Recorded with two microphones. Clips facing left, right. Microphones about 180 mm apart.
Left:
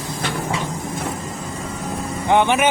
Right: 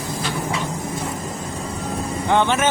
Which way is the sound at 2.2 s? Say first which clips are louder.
Left 2 dB; 15° left (ahead or behind).